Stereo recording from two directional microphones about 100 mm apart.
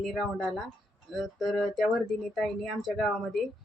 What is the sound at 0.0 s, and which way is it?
Speech, centre (ahead or behind).